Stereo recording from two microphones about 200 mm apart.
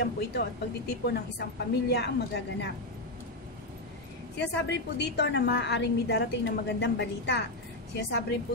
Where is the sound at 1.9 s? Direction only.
55° left (ahead or behind).